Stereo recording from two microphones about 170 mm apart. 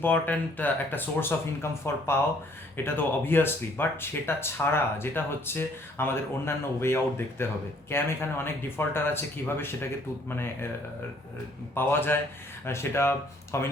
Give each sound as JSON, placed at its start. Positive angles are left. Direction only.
{"t": 0.0, "sound": "speech", "side_deg": 10}
{"t": 11.7, "sound": "speech", "side_deg": 15}